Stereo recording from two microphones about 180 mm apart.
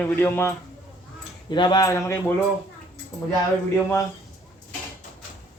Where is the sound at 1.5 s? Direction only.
25° left (ahead or behind).